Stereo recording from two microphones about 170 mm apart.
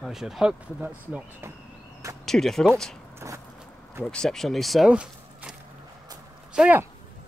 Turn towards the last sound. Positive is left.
turn(degrees=-5)  # may be behind; listen again after turning